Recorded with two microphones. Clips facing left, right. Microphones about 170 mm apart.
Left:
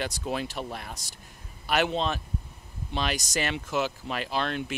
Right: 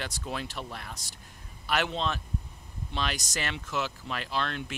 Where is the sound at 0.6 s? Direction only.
25° left (ahead or behind).